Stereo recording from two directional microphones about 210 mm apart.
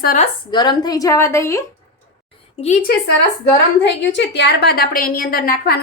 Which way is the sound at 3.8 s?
55° left (ahead or behind).